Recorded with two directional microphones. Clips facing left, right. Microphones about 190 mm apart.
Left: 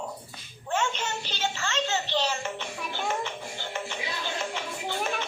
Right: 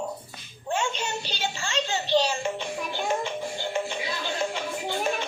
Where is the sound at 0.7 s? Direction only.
15° right (ahead or behind).